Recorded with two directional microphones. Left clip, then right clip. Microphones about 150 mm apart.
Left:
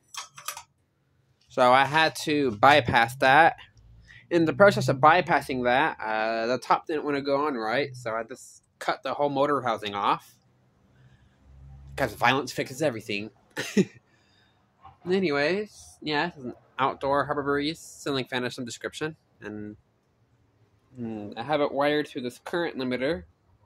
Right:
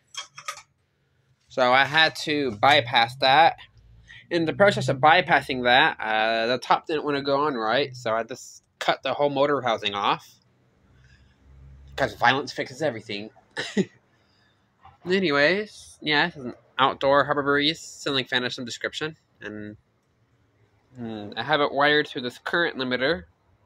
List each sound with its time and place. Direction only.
1.5 s speech: 25° left (ahead or behind)
2.6 s speech: 45° left (ahead or behind); by 10.4 s 10° left (ahead or behind)
11.9 s speech: 20° left (ahead or behind)
15.0 s speech: centre (ahead or behind)
21.0 s speech: 15° left (ahead or behind)